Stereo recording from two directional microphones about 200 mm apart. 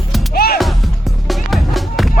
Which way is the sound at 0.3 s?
50° left (ahead or behind).